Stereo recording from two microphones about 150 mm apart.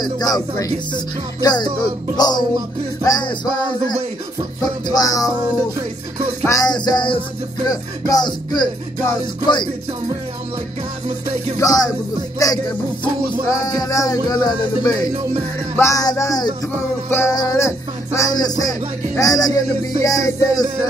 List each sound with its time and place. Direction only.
0.0 s music: 25° left (ahead or behind)
6.4 s music: 25° left (ahead or behind)
11.5 s music: 25° left (ahead or behind)